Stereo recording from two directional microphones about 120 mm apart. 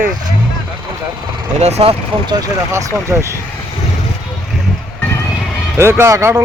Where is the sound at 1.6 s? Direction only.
65° right (ahead or behind).